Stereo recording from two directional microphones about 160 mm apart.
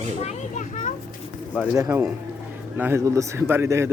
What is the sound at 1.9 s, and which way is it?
Speech, 10° right (ahead or behind).